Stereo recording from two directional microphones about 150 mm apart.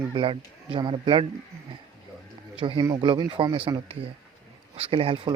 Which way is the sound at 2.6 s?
35° right (ahead or behind).